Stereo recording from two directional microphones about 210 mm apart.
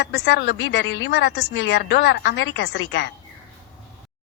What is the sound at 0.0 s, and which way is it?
A woman's voice, 55° left (ahead or behind).